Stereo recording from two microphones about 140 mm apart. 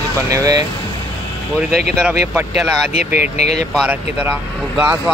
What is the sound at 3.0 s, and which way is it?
Speech, 60° left (ahead or behind).